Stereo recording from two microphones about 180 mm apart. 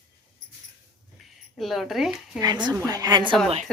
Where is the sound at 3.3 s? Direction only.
Centre (ahead or behind).